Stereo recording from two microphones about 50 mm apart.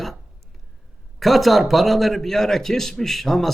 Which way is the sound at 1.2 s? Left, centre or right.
Centre.